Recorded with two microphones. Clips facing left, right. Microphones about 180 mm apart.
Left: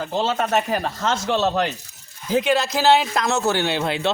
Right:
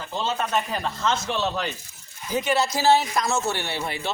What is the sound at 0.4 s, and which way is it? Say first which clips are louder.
Speech: left 5 dB; 60° left (ahead or behind).